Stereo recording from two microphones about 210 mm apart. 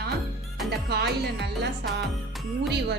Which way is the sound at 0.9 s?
50° right (ahead or behind).